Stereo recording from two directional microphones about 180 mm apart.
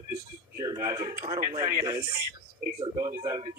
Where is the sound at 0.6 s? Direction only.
20° right (ahead or behind).